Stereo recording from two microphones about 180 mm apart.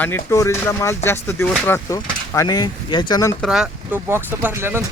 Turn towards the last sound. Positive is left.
turn(degrees=-15)  # may be behind; listen again after turning